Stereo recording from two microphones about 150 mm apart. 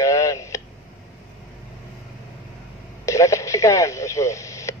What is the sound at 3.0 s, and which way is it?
Speech, 20° left (ahead or behind).